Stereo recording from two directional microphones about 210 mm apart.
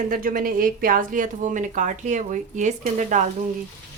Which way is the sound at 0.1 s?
40° right (ahead or behind).